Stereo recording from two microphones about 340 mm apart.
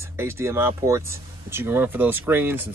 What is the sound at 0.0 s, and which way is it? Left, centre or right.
Speech, centre.